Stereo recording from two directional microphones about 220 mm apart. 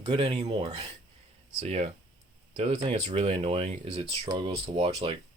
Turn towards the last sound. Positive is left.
turn(degrees=-25)  # may be behind; listen again after turning